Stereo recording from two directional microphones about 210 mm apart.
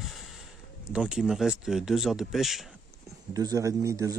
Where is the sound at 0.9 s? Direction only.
5° right (ahead or behind).